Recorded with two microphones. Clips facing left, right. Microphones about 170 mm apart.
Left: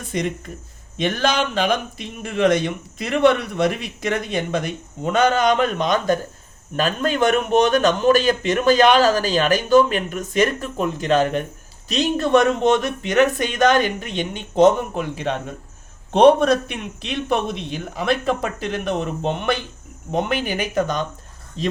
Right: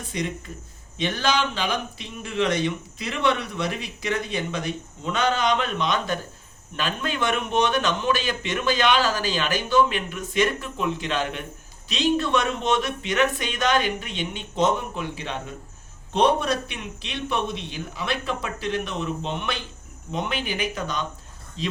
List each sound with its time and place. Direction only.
0.9 s a man's voice: 50° left (ahead or behind)